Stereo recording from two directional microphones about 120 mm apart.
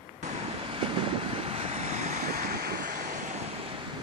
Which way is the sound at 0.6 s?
50° right (ahead or behind).